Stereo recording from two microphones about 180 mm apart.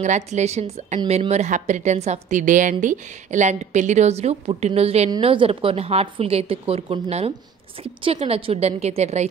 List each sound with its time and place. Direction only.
0.0 s a woman's voice: 40° right (ahead or behind)